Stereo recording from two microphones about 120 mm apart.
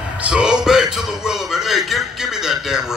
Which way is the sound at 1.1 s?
5° right (ahead or behind).